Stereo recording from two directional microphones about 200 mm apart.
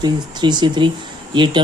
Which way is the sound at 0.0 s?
20° right (ahead or behind).